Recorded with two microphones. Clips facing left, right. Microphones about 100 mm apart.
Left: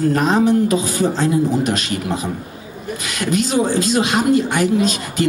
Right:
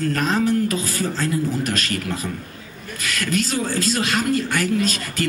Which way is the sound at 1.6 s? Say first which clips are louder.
Left 4 dB; 10° left (ahead or behind).